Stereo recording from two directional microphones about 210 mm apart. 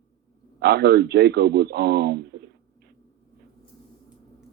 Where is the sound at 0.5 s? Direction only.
50° right (ahead or behind).